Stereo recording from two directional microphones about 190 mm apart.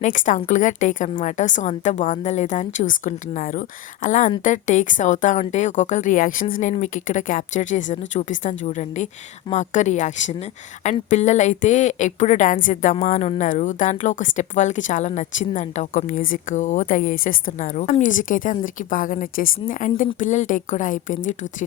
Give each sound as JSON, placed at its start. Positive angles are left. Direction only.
{"t": 0.0, "sound": "a woman's voice", "side_deg": 40}